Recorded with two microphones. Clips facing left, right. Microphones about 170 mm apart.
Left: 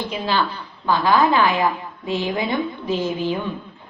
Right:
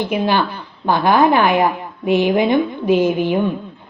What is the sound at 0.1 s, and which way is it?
A woman's voice, 60° right (ahead or behind).